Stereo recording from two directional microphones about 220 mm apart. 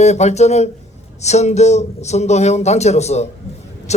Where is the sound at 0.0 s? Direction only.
30° left (ahead or behind).